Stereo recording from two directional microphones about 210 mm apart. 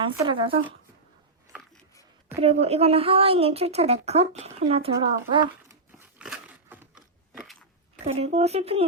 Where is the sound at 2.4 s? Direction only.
30° right (ahead or behind).